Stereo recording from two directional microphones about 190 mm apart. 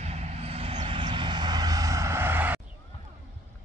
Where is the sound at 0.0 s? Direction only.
35° right (ahead or behind); by 2.6 s 10° right (ahead or behind).